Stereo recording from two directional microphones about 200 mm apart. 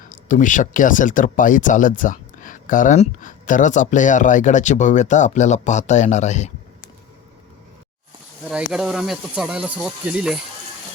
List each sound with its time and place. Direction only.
0.3 s speech: 40° left (ahead or behind)
8.7 s speech: 5° right (ahead or behind)